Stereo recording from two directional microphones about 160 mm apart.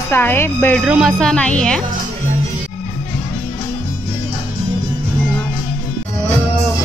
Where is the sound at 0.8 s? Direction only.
5° right (ahead or behind).